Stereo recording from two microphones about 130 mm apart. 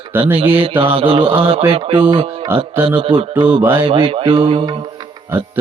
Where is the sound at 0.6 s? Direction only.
40° right (ahead or behind).